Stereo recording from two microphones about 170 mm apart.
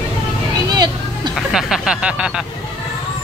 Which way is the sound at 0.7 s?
25° right (ahead or behind).